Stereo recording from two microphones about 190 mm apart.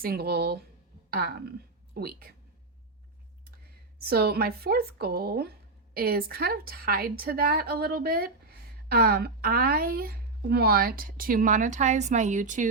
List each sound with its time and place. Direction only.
0.0 s speech: 55° right (ahead or behind)
3.9 s speech: 55° right (ahead or behind)